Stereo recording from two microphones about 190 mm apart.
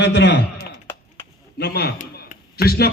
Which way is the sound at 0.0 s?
65° left (ahead or behind).